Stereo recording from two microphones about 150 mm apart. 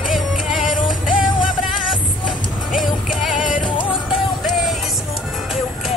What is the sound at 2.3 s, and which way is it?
Music, centre (ahead or behind).